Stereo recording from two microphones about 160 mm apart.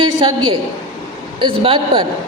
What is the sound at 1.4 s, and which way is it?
Speech, 35° right (ahead or behind).